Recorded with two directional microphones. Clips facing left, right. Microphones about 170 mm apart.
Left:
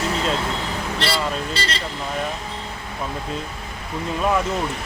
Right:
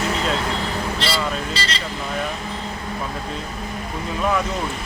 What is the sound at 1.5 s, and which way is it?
Speech, 55° left (ahead or behind).